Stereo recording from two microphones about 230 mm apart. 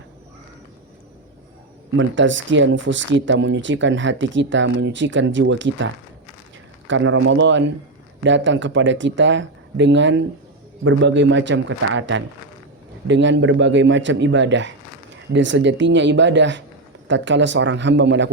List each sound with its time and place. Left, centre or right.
2.0 s speech: right